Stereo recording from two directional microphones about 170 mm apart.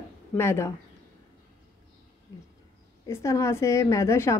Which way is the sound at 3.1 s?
15° left (ahead or behind).